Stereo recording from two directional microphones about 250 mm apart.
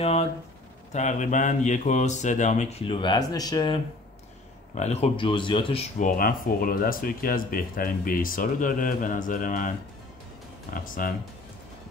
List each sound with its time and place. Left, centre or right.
0.0 s a sound: left
0.9 s speech: left
10.7 s speech: left